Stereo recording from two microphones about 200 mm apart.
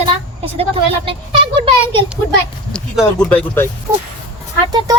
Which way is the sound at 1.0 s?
25° right (ahead or behind).